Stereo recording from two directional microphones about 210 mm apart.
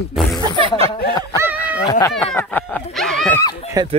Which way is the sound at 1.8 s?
20° left (ahead or behind).